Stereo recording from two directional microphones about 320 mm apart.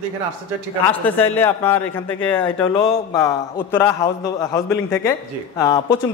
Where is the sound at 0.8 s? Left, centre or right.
Centre.